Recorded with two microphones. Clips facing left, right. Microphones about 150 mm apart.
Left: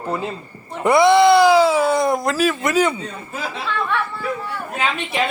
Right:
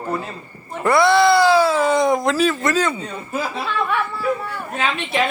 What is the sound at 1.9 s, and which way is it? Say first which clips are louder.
Speech: right 1 dB; 5° left (ahead or behind).